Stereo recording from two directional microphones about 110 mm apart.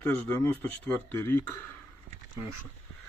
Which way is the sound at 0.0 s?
15° left (ahead or behind).